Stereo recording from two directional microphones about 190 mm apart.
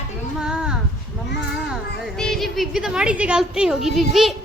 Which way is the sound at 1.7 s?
Centre (ahead or behind).